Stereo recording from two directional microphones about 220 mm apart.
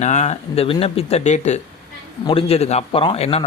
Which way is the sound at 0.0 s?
30° left (ahead or behind).